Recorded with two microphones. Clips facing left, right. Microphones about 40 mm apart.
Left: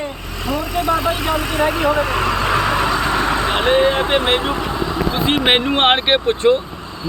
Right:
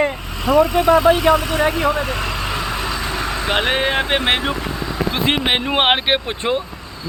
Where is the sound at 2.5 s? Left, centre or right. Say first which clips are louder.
Left 6 dB; left.